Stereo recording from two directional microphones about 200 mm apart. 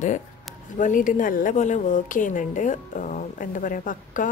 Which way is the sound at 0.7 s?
40° left (ahead or behind).